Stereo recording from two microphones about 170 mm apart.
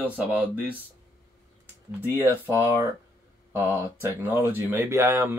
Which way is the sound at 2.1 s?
10° right (ahead or behind).